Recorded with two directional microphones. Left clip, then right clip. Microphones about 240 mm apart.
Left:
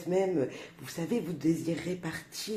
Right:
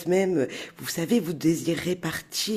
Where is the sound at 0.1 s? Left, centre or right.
Right.